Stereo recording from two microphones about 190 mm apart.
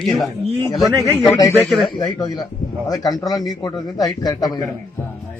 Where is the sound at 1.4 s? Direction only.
15° left (ahead or behind).